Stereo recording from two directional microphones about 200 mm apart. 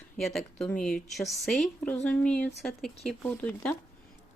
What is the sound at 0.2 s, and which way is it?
A woman's voice, centre (ahead or behind).